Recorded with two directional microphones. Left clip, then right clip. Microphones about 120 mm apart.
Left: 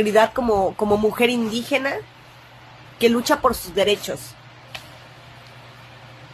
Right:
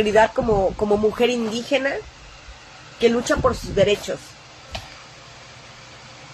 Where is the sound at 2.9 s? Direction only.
40° left (ahead or behind).